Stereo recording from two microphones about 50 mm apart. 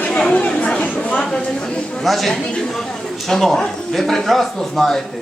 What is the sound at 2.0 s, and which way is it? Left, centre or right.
Speech, centre.